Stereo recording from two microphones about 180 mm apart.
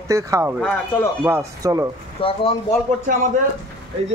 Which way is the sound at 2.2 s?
30° left (ahead or behind).